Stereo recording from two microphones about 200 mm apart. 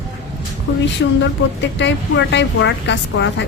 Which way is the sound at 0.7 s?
85° left.